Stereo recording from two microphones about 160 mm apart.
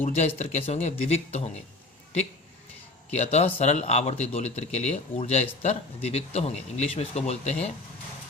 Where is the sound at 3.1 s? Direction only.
45° left (ahead or behind).